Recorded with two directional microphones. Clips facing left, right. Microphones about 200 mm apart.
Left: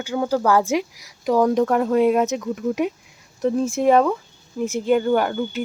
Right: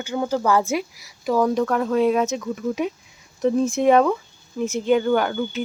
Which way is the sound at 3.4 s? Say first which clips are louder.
Right 1 dB; 5° left (ahead or behind).